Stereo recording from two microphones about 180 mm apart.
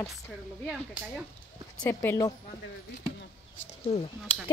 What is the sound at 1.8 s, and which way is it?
Speech, 15° left (ahead or behind).